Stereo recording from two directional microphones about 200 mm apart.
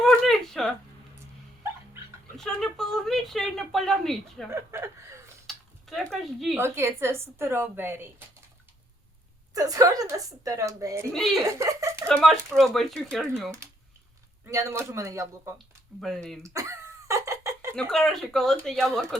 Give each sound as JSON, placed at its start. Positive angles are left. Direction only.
{"t": 0.0, "sound": "a sound", "side_deg": 0}
{"t": 2.4, "sound": "speech", "side_deg": 0}
{"t": 4.5, "sound": "a woman's voice", "side_deg": -15}
{"t": 5.5, "sound": "a sound", "side_deg": 0}
{"t": 6.6, "sound": "a woman's voice", "side_deg": -10}
{"t": 9.6, "sound": "a woman's voice", "side_deg": -15}
{"t": 12.0, "sound": "speech", "side_deg": 5}
{"t": 14.4, "sound": "a woman's voice", "side_deg": -15}
{"t": 15.5, "sound": "speech", "side_deg": 0}
{"t": 16.4, "sound": "a sound", "side_deg": -15}
{"t": 17.7, "sound": "speech", "side_deg": 0}